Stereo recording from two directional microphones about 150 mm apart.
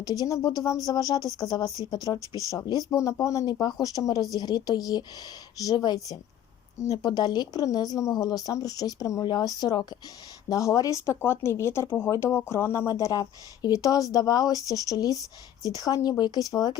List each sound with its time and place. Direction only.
0.0 s speech: 20° right (ahead or behind)
0.3 s speech: 20° left (ahead or behind)
2.1 s speech: 20° right (ahead or behind)
2.5 s speech: 25° left (ahead or behind)